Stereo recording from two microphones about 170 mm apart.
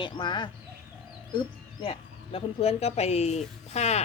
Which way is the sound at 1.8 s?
35° left (ahead or behind).